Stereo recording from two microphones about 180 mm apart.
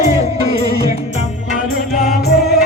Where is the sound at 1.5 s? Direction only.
50° left (ahead or behind).